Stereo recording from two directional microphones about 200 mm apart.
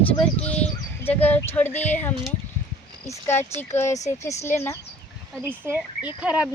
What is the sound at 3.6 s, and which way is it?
Speech, 10° left (ahead or behind).